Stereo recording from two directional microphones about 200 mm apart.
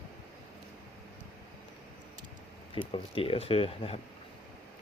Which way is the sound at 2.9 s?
25° left (ahead or behind).